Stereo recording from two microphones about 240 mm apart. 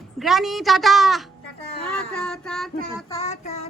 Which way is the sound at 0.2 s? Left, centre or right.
Centre.